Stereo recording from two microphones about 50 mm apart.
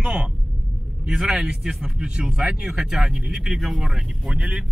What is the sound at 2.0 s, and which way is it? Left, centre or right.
Speech, centre.